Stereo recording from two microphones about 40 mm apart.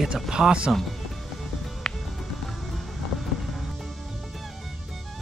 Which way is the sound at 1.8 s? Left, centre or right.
Centre.